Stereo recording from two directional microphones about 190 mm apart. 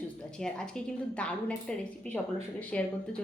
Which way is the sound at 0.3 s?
5° left (ahead or behind).